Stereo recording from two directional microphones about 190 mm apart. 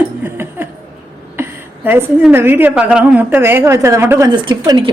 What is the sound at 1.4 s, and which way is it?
A woman's voice, 10° right (ahead or behind).